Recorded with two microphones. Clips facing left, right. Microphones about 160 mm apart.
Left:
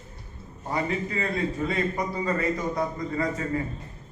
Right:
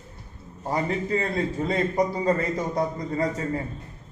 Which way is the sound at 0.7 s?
35° right (ahead or behind).